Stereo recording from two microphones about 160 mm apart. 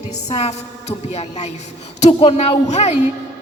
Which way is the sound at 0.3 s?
40° left (ahead or behind).